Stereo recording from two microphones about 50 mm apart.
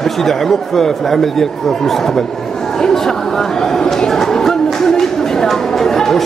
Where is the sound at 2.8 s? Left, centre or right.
Centre.